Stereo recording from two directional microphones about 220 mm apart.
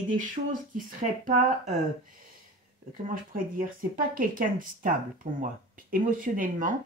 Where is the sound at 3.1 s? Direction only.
40° right (ahead or behind).